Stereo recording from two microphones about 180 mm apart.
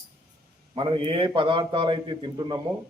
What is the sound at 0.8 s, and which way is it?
Speech, 30° right (ahead or behind).